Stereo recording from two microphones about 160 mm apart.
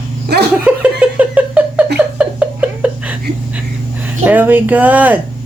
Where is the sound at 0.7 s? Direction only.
10° right (ahead or behind).